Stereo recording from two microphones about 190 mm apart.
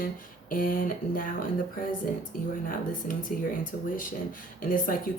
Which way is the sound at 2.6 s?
45° left (ahead or behind).